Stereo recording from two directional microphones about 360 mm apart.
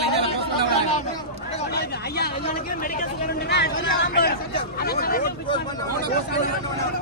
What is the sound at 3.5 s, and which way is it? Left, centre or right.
Speech, left.